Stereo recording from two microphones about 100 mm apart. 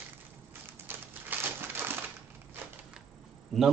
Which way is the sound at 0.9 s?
20° right (ahead or behind).